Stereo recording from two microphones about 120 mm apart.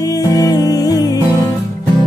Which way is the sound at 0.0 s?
30° left (ahead or behind).